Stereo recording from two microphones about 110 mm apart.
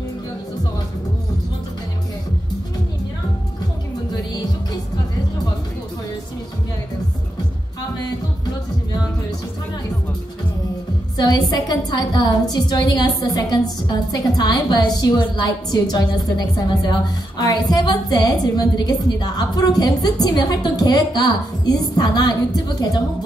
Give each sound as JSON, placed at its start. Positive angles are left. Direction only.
{"t": 11.1, "sound": "a woman's voice", "side_deg": 35}